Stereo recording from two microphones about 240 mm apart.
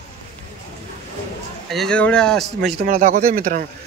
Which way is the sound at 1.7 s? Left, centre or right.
Centre.